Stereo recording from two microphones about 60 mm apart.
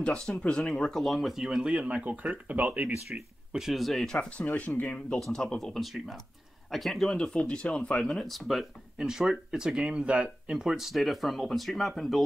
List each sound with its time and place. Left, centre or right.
0.5 s speech: centre; by 2.9 s right
3.5 s speech: centre
4.6 s speech: left
5.2 s speech: centre
8.9 s speech: centre
10.6 s speech: centre